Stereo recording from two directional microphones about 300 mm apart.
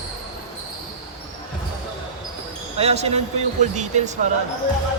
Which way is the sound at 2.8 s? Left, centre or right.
Right.